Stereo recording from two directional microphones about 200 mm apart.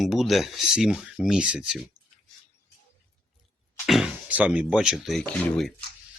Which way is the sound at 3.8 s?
Centre (ahead or behind).